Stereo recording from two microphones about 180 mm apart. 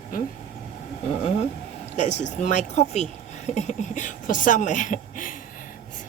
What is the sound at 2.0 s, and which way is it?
A woman's voice, 40° left (ahead or behind).